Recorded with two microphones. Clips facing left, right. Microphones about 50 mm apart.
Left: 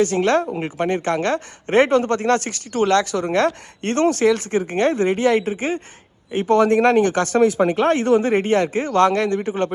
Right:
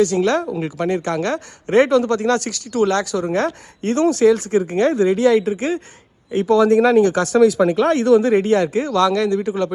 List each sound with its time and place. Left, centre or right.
0.0 s a woman's voice: left